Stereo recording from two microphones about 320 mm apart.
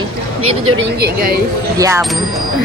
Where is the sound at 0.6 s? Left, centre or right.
Right.